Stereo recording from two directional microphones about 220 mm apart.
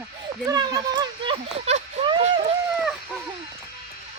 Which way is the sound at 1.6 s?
30° right (ahead or behind).